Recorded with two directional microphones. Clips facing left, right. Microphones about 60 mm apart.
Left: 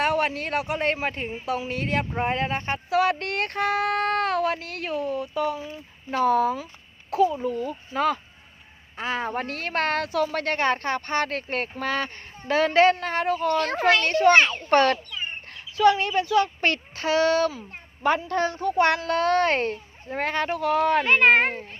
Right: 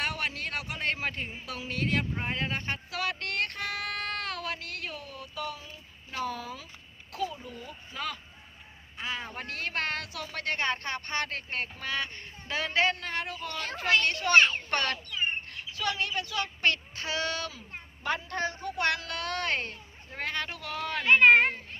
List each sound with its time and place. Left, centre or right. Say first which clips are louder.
0.0 s speech: left 9 dB; left
6.1 s speech: left 14 dB; left
7.1 s a child's voice: left 13 dB; left
7.4 s a woman's voice: left 15 dB; left
11.3 s a woman's voice: left 7 dB; left
13.8 s a woman's voice: left 4 dB; left
14.7 s speech: left 11 dB; left
18.3 s a woman's voice: left 7 dB; left
18.8 s speech: left 9 dB; left
21.1 s a woman's voice: right 3 dB; left